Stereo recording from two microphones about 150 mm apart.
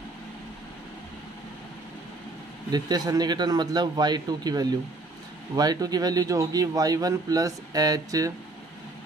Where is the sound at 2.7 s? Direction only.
25° right (ahead or behind).